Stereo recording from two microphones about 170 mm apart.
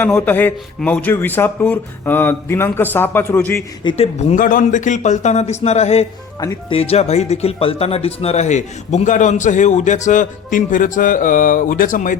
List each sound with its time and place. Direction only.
0.0 s a man's voice: 10° left (ahead or behind)
3.8 s speech: 35° left (ahead or behind)
6.4 s speech: 20° left (ahead or behind)
6.7 s speech: 35° left (ahead or behind)